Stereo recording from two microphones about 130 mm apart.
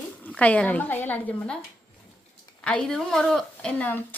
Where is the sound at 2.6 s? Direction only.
5° left (ahead or behind).